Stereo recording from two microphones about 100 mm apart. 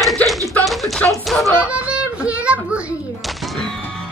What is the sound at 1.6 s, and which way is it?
Music, 10° right (ahead or behind).